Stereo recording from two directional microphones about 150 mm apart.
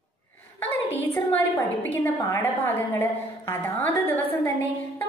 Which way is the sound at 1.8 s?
15° left (ahead or behind).